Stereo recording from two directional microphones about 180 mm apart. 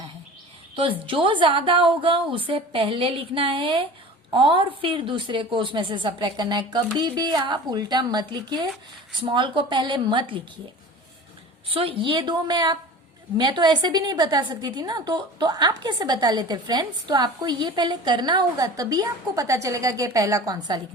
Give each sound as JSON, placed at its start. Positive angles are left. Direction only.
{"t": 0.8, "sound": "a woman's voice", "side_deg": -30}
{"t": 11.7, "sound": "a woman's voice", "side_deg": -30}